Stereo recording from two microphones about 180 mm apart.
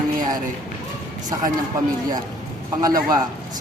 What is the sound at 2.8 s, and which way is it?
Speech, 20° right (ahead or behind).